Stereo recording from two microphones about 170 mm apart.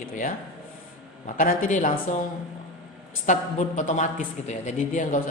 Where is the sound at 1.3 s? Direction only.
50° left (ahead or behind).